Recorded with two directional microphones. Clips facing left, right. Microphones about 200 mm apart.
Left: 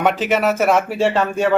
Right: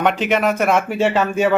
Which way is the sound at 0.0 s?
5° left (ahead or behind).